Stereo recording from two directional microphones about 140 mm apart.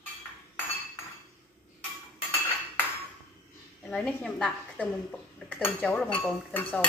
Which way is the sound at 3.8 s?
10° left (ahead or behind).